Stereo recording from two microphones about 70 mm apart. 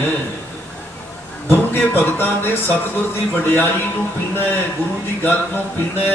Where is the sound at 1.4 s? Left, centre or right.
Left.